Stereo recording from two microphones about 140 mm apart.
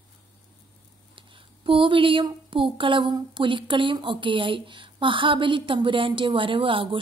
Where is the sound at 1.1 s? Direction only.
40° right (ahead or behind).